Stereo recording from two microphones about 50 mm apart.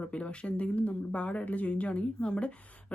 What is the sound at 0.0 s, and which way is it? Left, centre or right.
Speech, left.